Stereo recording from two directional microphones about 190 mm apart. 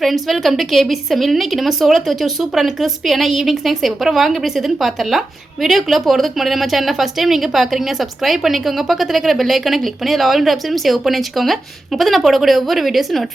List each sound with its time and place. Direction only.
0.0 s a woman's voice: centre (ahead or behind)